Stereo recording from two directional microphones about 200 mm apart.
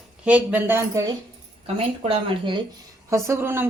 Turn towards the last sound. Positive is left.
turn(degrees=-10)  # may be behind; listen again after turning